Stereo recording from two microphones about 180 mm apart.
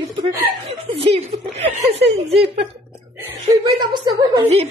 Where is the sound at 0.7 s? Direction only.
35° right (ahead or behind).